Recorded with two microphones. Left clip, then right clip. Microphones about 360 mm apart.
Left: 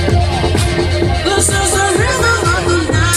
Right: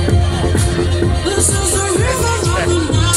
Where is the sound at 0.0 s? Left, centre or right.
Left.